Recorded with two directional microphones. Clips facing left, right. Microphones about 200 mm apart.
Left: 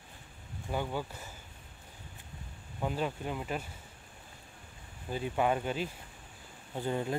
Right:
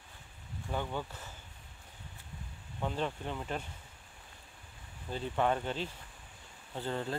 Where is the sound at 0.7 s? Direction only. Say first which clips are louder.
Left 2 dB; 10° left (ahead or behind).